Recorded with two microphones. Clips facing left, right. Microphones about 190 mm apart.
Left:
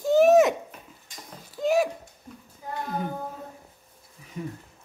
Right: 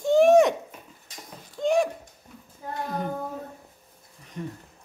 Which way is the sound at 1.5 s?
5° left (ahead or behind).